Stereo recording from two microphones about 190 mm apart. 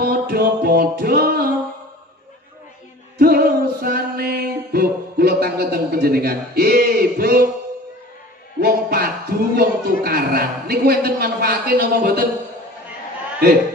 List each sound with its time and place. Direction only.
0.0 s a man's voice: 55° right (ahead or behind)
3.2 s music: 55° right (ahead or behind)
8.5 s a man's voice: 55° right (ahead or behind)